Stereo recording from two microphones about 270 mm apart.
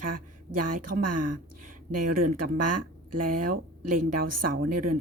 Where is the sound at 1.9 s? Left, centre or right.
Right.